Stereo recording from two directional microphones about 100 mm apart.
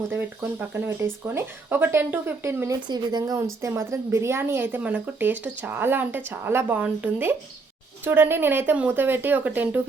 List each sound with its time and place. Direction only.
0.7 s speech: 25° right (ahead or behind)
2.8 s speech: 45° right (ahead or behind)
3.6 s speech: 30° right (ahead or behind)